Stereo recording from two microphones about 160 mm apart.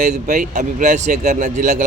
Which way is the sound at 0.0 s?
50° right (ahead or behind).